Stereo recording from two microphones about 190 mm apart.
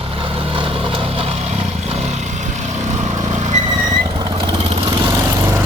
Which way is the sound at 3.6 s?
20° right (ahead or behind).